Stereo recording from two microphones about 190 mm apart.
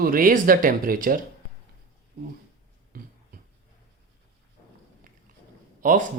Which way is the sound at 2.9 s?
50° right (ahead or behind).